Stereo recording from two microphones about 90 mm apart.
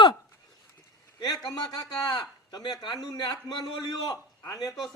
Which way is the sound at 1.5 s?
50° left (ahead or behind).